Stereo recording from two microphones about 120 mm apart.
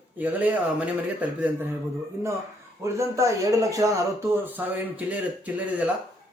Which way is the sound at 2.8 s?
25° right (ahead or behind).